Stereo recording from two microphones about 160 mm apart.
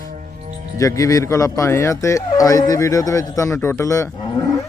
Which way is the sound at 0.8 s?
20° left (ahead or behind).